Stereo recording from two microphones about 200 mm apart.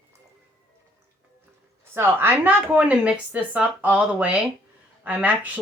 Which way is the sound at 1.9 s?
10° right (ahead or behind).